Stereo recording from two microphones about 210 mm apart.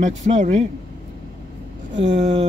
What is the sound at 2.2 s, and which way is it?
Speech, 30° right (ahead or behind).